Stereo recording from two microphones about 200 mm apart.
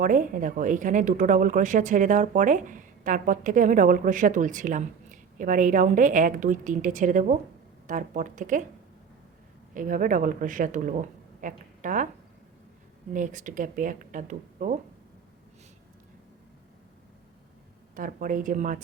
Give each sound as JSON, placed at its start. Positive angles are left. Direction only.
{"t": 0.0, "sound": "speech", "side_deg": -40}
{"t": 9.7, "sound": "a woman's voice", "side_deg": -40}
{"t": 13.1, "sound": "speech", "side_deg": -40}
{"t": 17.9, "sound": "speech", "side_deg": -45}